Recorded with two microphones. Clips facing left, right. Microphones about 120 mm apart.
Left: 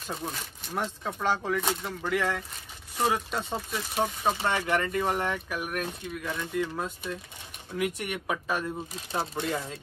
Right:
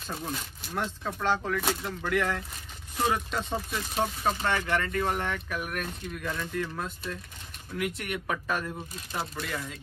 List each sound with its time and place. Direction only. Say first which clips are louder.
0.3 s speech: right 1 dB; centre (ahead or behind)
1.0 s speech: even; 15° left (ahead or behind)
1.6 s speech: even; centre (ahead or behind)
4.3 s speech: left 2 dB; 20° left (ahead or behind)
9.1 s speech: left 4 dB; 25° left (ahead or behind)